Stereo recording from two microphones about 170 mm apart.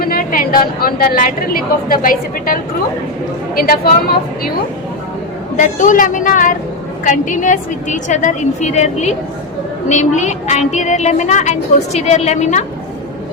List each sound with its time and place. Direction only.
0.0 s a woman's voice: 60° left (ahead or behind)
5.5 s a woman's voice: 50° left (ahead or behind)